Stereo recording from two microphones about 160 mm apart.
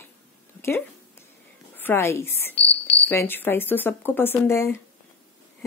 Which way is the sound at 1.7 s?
15° left (ahead or behind).